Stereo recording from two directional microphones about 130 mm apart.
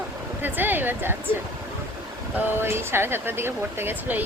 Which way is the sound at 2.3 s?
15° right (ahead or behind).